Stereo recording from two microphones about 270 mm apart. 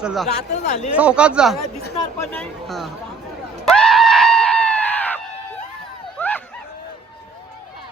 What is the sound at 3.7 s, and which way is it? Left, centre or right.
Screaming, centre.